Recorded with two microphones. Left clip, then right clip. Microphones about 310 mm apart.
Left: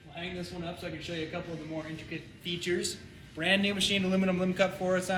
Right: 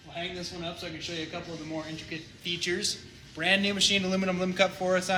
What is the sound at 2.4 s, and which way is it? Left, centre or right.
A man's voice, centre.